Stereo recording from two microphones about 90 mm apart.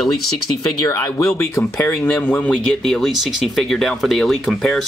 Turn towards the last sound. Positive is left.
turn(degrees=5)  # may be behind; listen again after turning